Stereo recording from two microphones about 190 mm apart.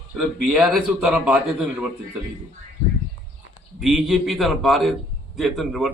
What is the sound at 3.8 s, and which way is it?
A man's voice, centre (ahead or behind).